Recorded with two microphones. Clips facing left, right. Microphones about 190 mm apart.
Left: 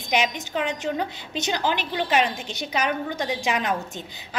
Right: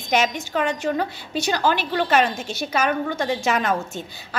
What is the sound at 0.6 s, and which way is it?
A woman's voice, 20° left (ahead or behind).